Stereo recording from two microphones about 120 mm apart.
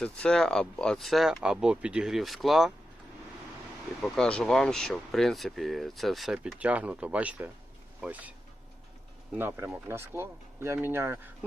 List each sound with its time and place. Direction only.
0.0 s speech: 10° left (ahead or behind)
4.0 s speech: 5° left (ahead or behind); by 8.3 s 10° right (ahead or behind)
9.4 s speech: 15° right (ahead or behind)